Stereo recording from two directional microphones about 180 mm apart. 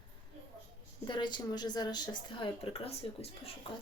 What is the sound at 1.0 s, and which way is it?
Speech, 25° left (ahead or behind).